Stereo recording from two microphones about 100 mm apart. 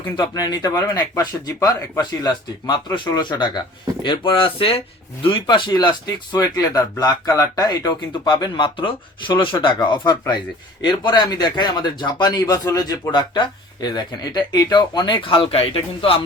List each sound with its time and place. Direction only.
0.2 s speech: 40° left (ahead or behind); by 4.8 s 65° left (ahead or behind)
5.2 s speech: 55° left (ahead or behind)